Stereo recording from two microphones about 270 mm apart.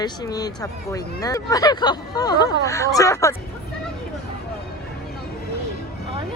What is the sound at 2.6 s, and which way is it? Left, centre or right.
Speech, centre.